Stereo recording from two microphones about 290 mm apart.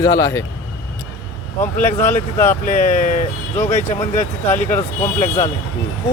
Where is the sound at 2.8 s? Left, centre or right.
Left.